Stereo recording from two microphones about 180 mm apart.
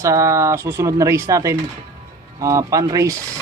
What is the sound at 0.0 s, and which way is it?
Speech, 15° right (ahead or behind).